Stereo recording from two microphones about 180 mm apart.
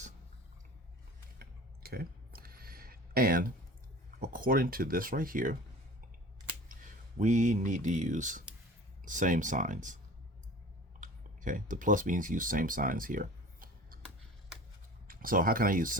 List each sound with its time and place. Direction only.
1.4 s a sound: 55° right (ahead or behind)
4.2 s speech: 50° right (ahead or behind)
6.7 s speech: 45° right (ahead or behind)
11.0 s speech: 45° right (ahead or behind)
15.0 s speech: 50° right (ahead or behind)